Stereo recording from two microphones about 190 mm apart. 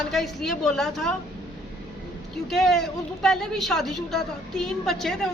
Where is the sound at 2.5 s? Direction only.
Centre (ahead or behind).